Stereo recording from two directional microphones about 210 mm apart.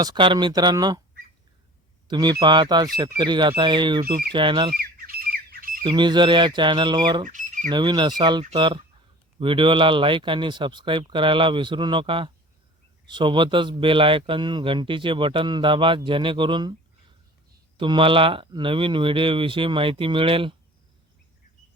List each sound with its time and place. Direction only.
0.0 s speech: 20° right (ahead or behind)
2.0 s speech: 20° right (ahead or behind)
4.7 s squawk: 45° right (ahead or behind)
5.8 s speech: 20° right (ahead or behind)
7.3 s squawk: 35° right (ahead or behind)
7.7 s speech: 20° right (ahead or behind)
17.7 s speech: 25° right (ahead or behind)